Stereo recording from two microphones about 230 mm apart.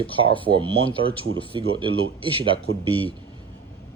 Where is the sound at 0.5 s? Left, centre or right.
Right.